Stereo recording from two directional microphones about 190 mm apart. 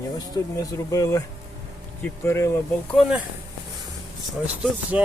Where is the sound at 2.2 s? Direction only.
15° left (ahead or behind).